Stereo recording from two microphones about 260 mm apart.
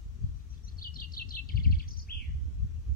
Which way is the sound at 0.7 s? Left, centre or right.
Left.